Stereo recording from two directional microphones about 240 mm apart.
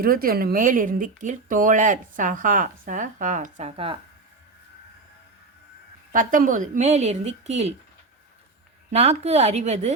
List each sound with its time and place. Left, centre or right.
0.0 s speech: right
6.1 s a woman's voice: right
8.9 s a woman's voice: right